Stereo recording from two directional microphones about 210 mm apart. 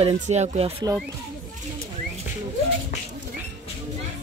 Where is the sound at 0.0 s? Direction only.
30° right (ahead or behind).